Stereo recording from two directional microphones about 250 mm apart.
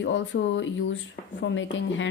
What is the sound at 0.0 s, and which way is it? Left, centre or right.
A woman's voice, left.